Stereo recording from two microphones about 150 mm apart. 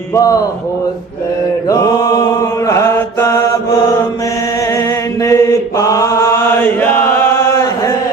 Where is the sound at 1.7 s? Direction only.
25° left (ahead or behind).